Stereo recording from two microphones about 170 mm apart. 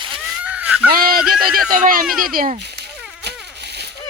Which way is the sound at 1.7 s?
55° right (ahead or behind).